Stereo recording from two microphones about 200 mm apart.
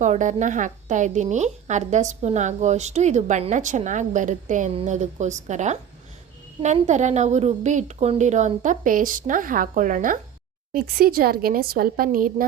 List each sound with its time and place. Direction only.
0.0 s a woman's voice: 40° right (ahead or behind)